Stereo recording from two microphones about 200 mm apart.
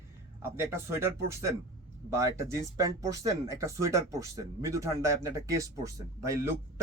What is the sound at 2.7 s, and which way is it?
Speech, 15° right (ahead or behind).